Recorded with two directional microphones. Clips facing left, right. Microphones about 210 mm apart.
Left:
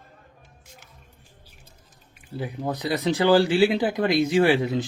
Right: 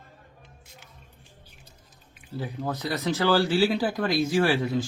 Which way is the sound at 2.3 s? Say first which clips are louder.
Left 2 dB; 15° left (ahead or behind).